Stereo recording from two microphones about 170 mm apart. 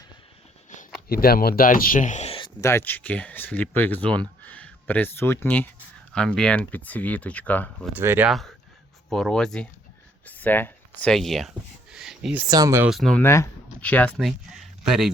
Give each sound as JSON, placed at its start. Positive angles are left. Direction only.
{"t": 1.0, "sound": "speech", "side_deg": 65}
{"t": 2.6, "sound": "speech", "side_deg": 15}
{"t": 7.9, "sound": "speech", "side_deg": -10}
{"t": 8.3, "sound": "speech", "side_deg": 0}
{"t": 12.5, "sound": "speech", "side_deg": -20}
{"t": 12.9, "sound": "speech", "side_deg": 5}